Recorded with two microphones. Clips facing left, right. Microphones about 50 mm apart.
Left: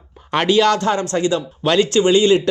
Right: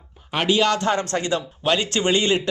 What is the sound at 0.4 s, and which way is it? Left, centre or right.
Speech, right.